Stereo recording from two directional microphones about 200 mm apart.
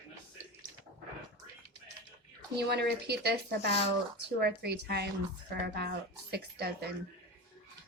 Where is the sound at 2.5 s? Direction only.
55° right (ahead or behind).